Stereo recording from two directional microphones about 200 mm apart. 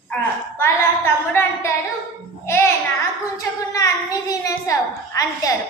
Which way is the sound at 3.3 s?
15° left (ahead or behind).